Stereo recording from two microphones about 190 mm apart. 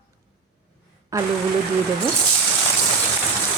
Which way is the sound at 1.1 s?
15° right (ahead or behind).